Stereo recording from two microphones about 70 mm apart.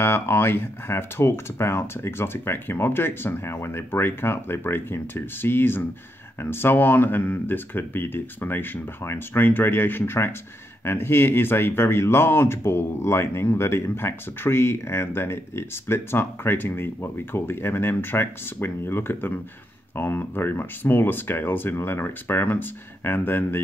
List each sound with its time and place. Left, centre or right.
0.0 s speech: left